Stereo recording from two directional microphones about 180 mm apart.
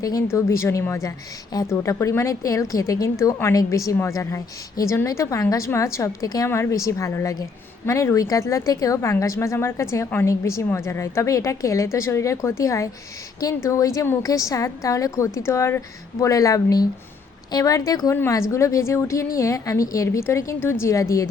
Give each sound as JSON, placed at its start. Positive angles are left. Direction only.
{"t": 0.0, "sound": "a woman's voice", "side_deg": 20}